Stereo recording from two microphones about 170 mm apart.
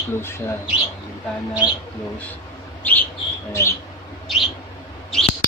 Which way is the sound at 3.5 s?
15° left (ahead or behind).